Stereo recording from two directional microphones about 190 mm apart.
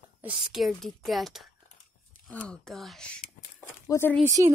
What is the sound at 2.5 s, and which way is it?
A woman's voice, centre (ahead or behind).